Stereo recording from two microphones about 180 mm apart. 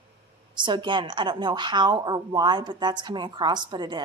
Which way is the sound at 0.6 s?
25° right (ahead or behind).